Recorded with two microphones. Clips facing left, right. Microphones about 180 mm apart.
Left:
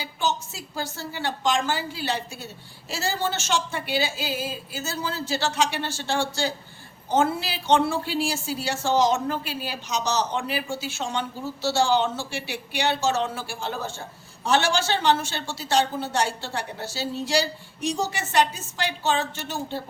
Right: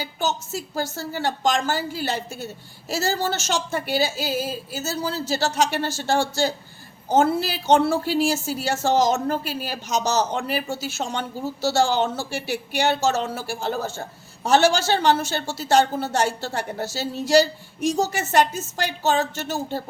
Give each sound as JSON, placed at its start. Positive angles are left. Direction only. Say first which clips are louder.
{"t": 0.0, "sound": "a woman's voice", "louder": "right 1 dB", "side_deg": -45}